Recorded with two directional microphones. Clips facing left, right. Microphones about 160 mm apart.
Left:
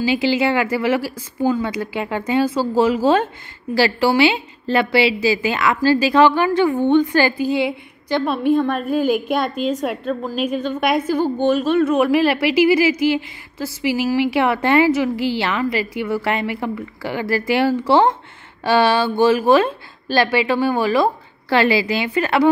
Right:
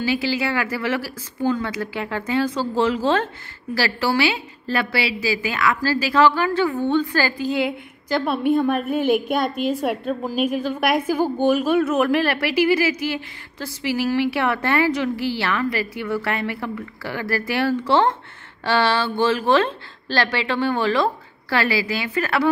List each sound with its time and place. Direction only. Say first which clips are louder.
0.0 s a woman's voice: left 5 dB; 20° left (ahead or behind)
7.4 s a woman's voice: left 3 dB; 5° left (ahead or behind)
12.1 s a woman's voice: left 4 dB; 10° left (ahead or behind)
21.5 s a woman's voice: left 5 dB; 20° left (ahead or behind)